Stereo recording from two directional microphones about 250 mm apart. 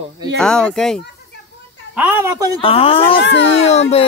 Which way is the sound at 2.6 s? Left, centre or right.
Left.